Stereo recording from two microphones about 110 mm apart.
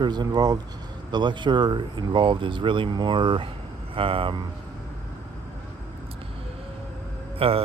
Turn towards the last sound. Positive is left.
turn(degrees=-60)  # may be behind; listen again after turning